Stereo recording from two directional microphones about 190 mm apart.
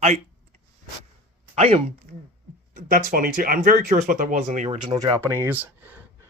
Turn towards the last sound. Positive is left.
turn(degrees=-10)  # may be behind; listen again after turning